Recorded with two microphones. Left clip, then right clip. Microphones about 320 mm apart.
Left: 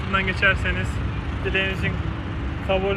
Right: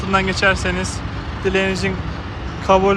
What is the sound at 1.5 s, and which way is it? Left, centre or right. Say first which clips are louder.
Speech: right 5 dB; right.